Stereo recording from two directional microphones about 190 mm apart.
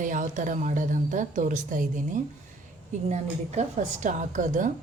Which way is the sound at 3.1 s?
35° right (ahead or behind).